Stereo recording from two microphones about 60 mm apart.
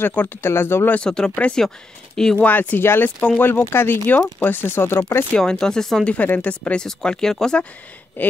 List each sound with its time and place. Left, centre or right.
0.0 s speech: left
1.0 s speech: centre
2.3 s a woman's voice: left
5.3 s speech: centre
6.1 s a woman's voice: left
8.2 s speech: left